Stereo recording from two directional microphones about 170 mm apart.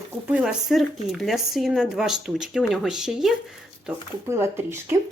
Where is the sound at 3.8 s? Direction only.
15° right (ahead or behind).